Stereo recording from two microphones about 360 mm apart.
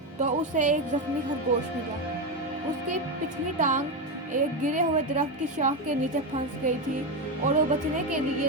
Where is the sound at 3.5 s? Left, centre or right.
Right.